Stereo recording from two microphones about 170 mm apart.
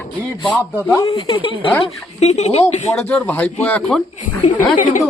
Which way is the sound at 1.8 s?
40° left (ahead or behind).